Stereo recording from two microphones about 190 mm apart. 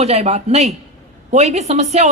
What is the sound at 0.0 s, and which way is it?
A woman's voice, 35° right (ahead or behind).